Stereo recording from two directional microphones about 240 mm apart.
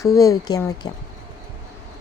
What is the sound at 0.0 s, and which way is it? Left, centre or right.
Speech, centre.